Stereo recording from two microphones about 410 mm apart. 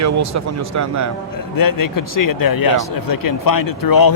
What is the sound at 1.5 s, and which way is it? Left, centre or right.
Speech, left.